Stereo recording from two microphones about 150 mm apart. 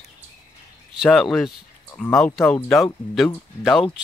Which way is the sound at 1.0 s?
Centre (ahead or behind).